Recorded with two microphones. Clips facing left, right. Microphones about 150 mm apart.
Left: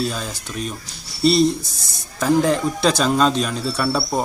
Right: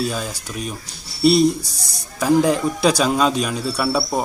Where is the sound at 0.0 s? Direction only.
5° right (ahead or behind).